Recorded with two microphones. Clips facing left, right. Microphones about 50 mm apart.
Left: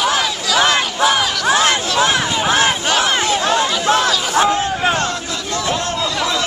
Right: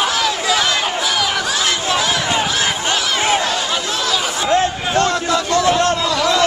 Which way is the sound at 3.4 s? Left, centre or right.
Left.